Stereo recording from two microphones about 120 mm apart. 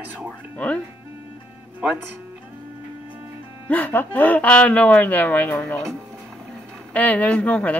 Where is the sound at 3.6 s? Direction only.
15° left (ahead or behind).